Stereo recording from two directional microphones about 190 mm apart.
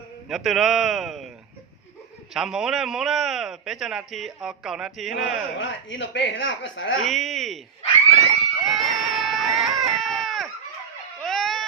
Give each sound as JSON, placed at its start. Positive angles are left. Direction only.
{"t": 0.3, "sound": "a man's voice", "side_deg": 0}
{"t": 2.3, "sound": "a man's voice", "side_deg": -5}
{"t": 5.5, "sound": "a woman's voice", "side_deg": 75}
{"t": 7.0, "sound": "a man's voice", "side_deg": 0}
{"t": 8.6, "sound": "a sound", "side_deg": 0}